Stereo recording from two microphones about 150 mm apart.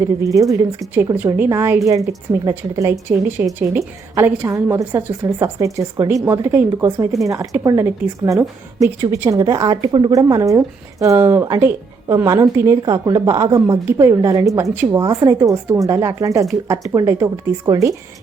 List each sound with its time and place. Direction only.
0.8 s a woman's voice: 20° right (ahead or behind)